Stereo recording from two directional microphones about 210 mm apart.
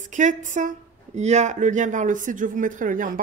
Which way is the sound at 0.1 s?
35° right (ahead or behind).